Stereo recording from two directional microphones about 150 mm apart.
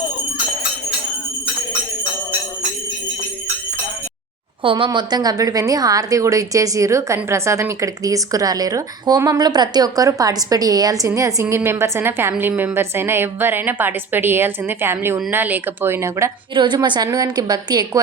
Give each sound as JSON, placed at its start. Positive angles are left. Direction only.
{"t": 4.6, "sound": "a woman's voice", "side_deg": -35}
{"t": 16.6, "sound": "a woman's voice", "side_deg": -30}